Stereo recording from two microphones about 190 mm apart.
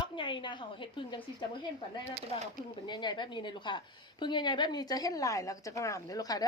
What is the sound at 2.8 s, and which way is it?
A woman's voice, 25° left (ahead or behind).